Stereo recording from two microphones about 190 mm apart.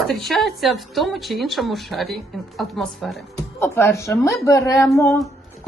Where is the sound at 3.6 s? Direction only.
15° left (ahead or behind).